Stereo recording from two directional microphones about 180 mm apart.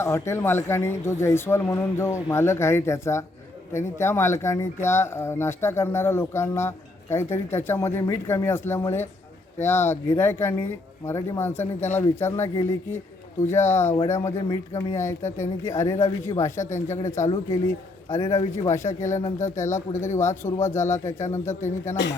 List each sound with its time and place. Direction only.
0.0 s speech: 15° left (ahead or behind)
16.6 s speech: 40° left (ahead or behind)
17.5 s a man's voice: 15° left (ahead or behind)